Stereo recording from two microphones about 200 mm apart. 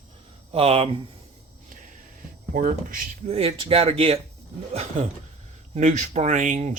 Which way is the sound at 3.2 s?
30° right (ahead or behind).